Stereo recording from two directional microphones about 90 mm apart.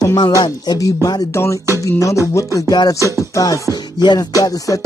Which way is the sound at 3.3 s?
40° left (ahead or behind).